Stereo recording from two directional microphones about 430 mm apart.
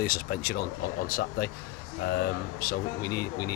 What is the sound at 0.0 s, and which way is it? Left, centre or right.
Speech, centre.